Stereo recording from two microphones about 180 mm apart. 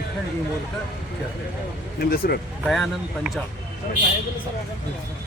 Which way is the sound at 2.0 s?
60° left (ahead or behind).